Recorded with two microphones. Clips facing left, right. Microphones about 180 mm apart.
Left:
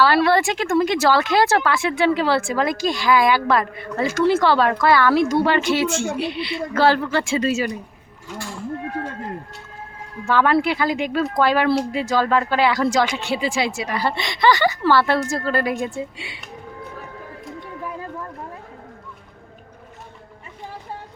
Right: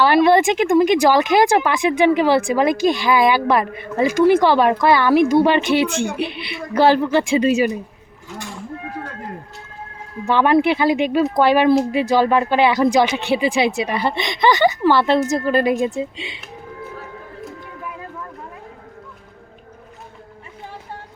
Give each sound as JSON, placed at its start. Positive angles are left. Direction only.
{"t": 0.0, "sound": "speech", "side_deg": -20}
{"t": 10.2, "sound": "speech", "side_deg": -20}